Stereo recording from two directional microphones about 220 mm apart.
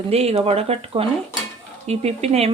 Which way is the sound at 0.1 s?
30° right (ahead or behind).